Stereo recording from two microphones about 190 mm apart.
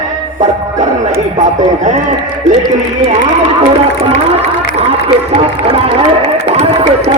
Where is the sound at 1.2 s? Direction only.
40° right (ahead or behind).